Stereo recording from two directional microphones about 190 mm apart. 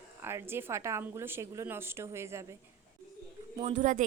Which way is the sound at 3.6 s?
35° right (ahead or behind).